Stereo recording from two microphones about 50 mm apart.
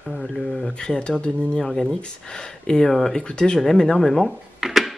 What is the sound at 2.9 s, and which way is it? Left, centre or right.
Mantra, centre.